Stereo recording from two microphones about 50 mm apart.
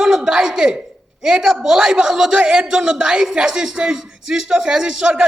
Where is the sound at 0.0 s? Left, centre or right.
Centre.